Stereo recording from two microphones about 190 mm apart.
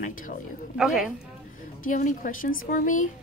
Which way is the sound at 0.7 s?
5° right (ahead or behind).